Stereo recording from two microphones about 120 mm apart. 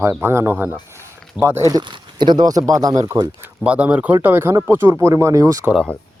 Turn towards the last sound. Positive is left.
turn(degrees=-30)  # may be behind; listen again after turning